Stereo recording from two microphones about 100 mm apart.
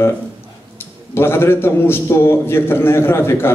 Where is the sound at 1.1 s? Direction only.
25° left (ahead or behind).